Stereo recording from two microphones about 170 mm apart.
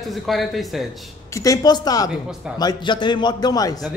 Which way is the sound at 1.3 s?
20° left (ahead or behind).